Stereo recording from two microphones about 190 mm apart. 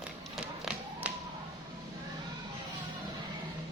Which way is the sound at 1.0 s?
5° right (ahead or behind).